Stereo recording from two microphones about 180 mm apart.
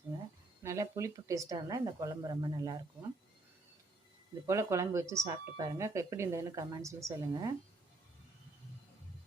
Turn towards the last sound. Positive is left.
turn(degrees=-20)  # may be behind; listen again after turning